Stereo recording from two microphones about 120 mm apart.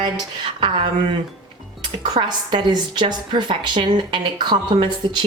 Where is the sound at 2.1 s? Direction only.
35° right (ahead or behind).